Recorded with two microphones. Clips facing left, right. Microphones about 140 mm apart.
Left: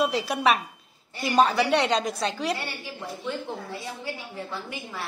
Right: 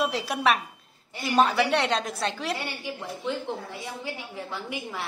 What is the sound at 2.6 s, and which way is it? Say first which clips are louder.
Speech: right 1 dB; 15° right (ahead or behind).